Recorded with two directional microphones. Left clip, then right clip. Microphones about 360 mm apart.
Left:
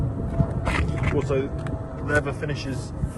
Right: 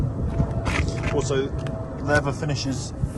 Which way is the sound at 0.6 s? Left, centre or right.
Centre.